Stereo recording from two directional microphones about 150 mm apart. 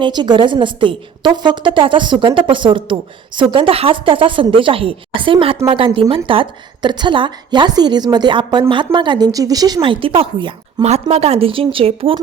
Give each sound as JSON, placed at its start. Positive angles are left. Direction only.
{"t": 0.0, "sound": "a woman's voice", "side_deg": -30}